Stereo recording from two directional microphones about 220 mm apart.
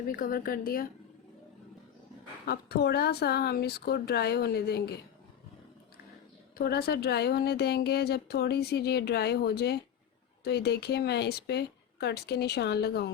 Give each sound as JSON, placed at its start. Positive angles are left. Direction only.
{"t": 0.2, "sound": "a woman's voice", "side_deg": 40}
{"t": 2.5, "sound": "speech", "side_deg": 45}
{"t": 6.6, "sound": "speech", "side_deg": 45}